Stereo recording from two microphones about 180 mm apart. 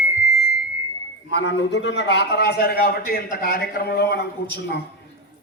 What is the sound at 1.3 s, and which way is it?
A man's voice, 75° left (ahead or behind).